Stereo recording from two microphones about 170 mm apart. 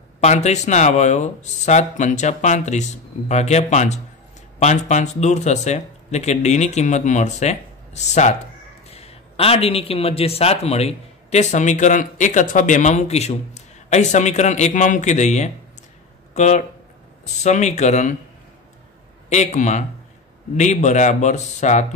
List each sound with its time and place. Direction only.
0.2 s a man's voice: 40° left (ahead or behind)
19.2 s a man's voice: 40° left (ahead or behind)